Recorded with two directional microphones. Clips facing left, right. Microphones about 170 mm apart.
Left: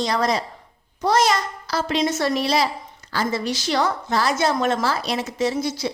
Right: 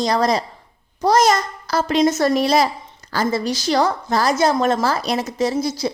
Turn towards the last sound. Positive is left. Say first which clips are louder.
# right 3 dB
turn(degrees=-40)  # may be behind; listen again after turning